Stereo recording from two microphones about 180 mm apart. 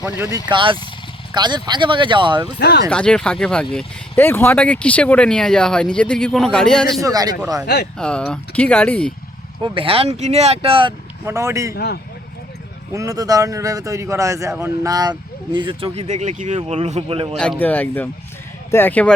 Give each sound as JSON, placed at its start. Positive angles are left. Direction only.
{"t": 0.4, "sound": "speech", "side_deg": -25}
{"t": 2.6, "sound": "speech", "side_deg": 60}
{"t": 2.9, "sound": "speech", "side_deg": 5}
{"t": 7.0, "sound": "speech", "side_deg": -20}
{"t": 7.9, "sound": "speech", "side_deg": 5}
{"t": 9.6, "sound": "speech", "side_deg": -30}
{"t": 11.3, "sound": "speech", "side_deg": -15}
{"t": 11.7, "sound": "speech", "side_deg": 65}
{"t": 12.9, "sound": "speech", "side_deg": -20}
{"t": 17.3, "sound": "speech", "side_deg": 5}